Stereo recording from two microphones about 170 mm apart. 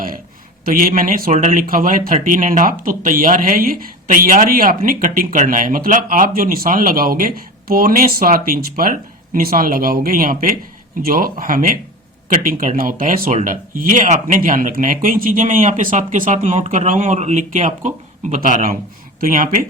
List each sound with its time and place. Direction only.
0.6 s speech: 55° right (ahead or behind)